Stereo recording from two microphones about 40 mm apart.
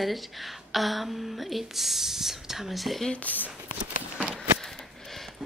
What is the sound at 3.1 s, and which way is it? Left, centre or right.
Speech, left.